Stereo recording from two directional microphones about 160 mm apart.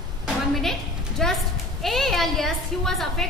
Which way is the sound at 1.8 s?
Centre (ahead or behind).